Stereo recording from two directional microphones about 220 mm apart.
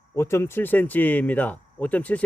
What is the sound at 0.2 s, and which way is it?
Speech, 10° left (ahead or behind).